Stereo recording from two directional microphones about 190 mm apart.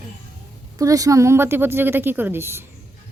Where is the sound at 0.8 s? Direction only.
15° right (ahead or behind).